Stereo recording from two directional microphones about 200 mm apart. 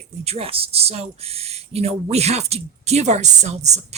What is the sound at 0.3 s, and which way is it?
Speech, 30° right (ahead or behind).